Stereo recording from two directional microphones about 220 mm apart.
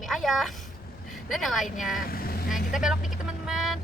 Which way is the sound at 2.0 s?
40° left (ahead or behind).